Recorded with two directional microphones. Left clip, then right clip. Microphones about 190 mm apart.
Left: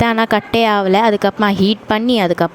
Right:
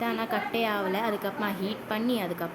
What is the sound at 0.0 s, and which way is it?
Speech, 55° left (ahead or behind).